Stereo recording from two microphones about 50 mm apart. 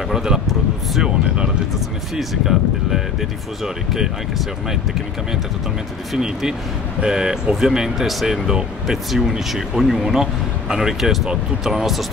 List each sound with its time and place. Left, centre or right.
0.1 s speech: centre
2.1 s speech: centre
6.1 s speech: centre